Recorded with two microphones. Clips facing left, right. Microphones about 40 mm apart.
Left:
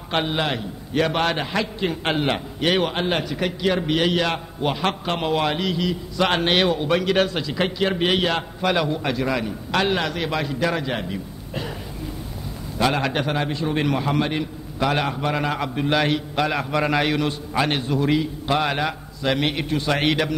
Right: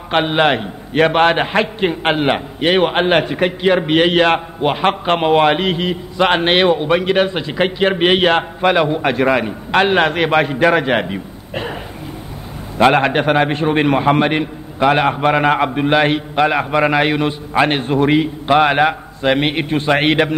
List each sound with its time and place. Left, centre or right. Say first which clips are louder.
0.1 s a man's voice: right 9 dB; right
7.4 s a man's voice: right 6 dB; right
11.1 s a man's voice: right 5 dB; right
12.7 s a man's voice: right 9 dB; right